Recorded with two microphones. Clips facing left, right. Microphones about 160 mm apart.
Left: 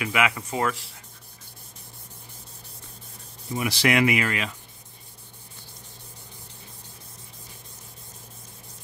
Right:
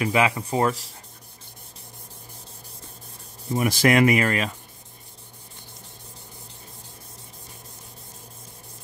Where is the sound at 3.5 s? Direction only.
45° right (ahead or behind).